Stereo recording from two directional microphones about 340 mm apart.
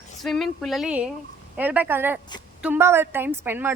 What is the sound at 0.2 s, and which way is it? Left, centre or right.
A woman's voice, centre.